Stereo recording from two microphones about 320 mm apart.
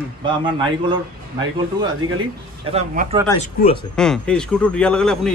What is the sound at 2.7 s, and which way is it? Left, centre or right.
Speech, right.